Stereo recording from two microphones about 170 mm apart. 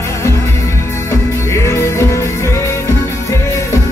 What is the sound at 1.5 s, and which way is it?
Music, 15° left (ahead or behind).